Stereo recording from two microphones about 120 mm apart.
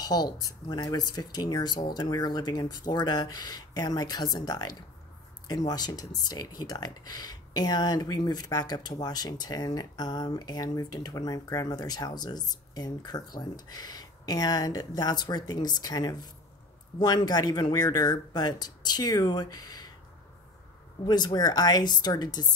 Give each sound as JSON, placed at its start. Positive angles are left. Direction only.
{"t": 0.0, "sound": "speech", "side_deg": 35}
{"t": 21.0, "sound": "speech", "side_deg": 35}